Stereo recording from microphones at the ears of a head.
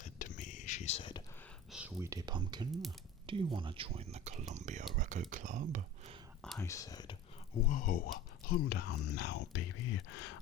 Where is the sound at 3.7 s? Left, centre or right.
Right.